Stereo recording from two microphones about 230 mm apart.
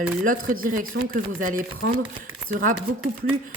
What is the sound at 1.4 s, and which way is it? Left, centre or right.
Speech, right.